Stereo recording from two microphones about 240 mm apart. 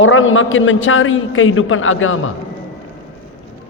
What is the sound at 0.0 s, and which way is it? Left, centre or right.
A man's voice, left.